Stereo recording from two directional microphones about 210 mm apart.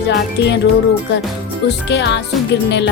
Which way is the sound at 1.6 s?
55° left (ahead or behind).